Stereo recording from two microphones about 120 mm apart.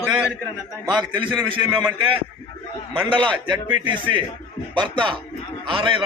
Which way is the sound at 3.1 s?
40° right (ahead or behind).